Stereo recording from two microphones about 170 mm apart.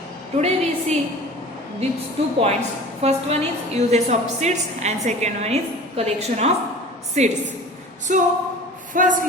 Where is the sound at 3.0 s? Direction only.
40° right (ahead or behind).